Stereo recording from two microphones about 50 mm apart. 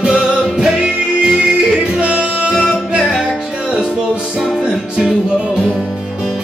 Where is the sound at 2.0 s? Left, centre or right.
Right.